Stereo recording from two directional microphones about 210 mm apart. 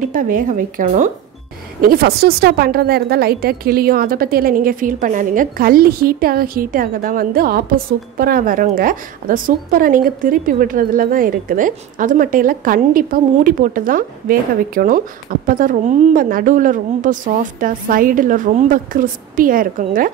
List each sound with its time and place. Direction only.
0.1 s a woman's voice: 40° right (ahead or behind)